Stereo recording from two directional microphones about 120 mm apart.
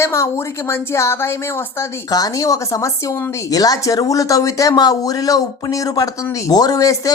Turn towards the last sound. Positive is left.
turn(degrees=30)  # may be behind; listen again after turning